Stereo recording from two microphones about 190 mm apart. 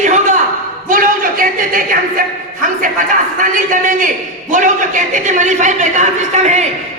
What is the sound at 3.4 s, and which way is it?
A man's voice, 45° right (ahead or behind).